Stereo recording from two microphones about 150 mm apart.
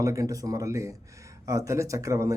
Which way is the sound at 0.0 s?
20° right (ahead or behind).